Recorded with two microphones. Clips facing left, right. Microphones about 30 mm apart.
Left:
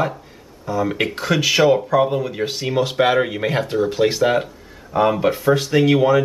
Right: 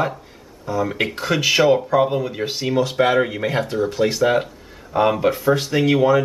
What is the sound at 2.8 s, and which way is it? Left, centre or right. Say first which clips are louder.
Speech: left 1 dB; centre.